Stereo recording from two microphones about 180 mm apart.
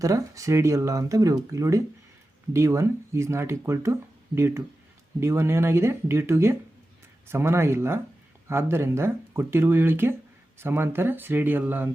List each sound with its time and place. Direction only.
0.0 s speech: 20° right (ahead or behind)